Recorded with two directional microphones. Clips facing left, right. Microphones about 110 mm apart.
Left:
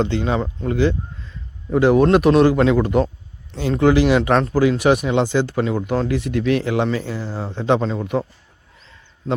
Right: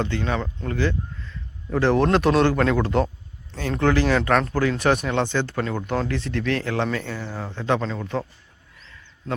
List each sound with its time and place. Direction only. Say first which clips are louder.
0.0 s a man's voice: left 5 dB; 20° left (ahead or behind)